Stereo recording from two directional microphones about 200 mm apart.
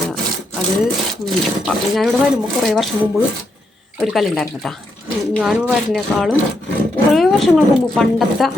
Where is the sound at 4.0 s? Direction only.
Centre (ahead or behind).